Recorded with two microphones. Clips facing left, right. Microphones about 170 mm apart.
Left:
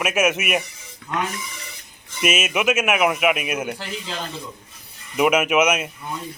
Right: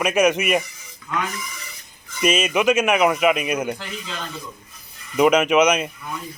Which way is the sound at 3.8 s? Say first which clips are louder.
Left 2 dB; 30° left (ahead or behind).